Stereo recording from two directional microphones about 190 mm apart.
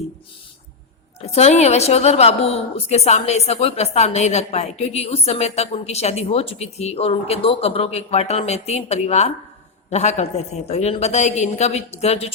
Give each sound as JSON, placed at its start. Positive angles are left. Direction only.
{"t": 1.2, "sound": "a woman's voice", "side_deg": 35}